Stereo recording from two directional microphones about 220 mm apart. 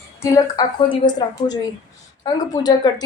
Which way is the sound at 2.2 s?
20° left (ahead or behind).